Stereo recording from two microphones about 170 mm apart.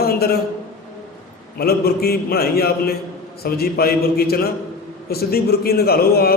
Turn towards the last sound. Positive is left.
turn(degrees=65)  # may be behind; listen again after turning